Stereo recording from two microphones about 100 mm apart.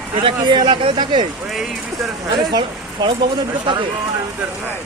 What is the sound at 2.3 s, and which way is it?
Speech, 50° right (ahead or behind).